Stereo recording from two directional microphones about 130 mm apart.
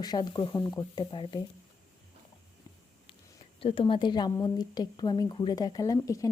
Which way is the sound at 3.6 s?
45° left (ahead or behind).